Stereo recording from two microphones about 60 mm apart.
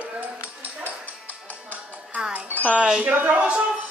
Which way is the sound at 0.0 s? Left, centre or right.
Right.